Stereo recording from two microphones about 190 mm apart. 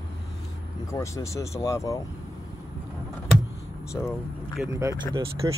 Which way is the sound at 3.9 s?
10° left (ahead or behind).